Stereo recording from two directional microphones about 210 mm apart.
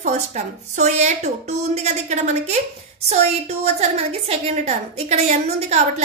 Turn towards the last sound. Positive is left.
turn(degrees=-30)  # may be behind; listen again after turning